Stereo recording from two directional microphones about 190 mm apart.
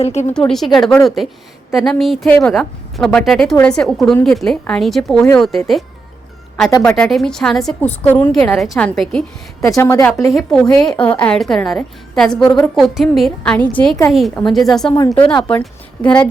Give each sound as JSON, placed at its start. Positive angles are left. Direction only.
{"t": 0.0, "sound": "speech", "side_deg": 35}
{"t": 0.3, "sound": "a woman's voice", "side_deg": 0}
{"t": 6.8, "sound": "a woman's voice", "side_deg": 5}
{"t": 9.7, "sound": "a woman's voice", "side_deg": 15}
{"t": 15.1, "sound": "speech", "side_deg": 25}
{"t": 15.4, "sound": "a woman's voice", "side_deg": 5}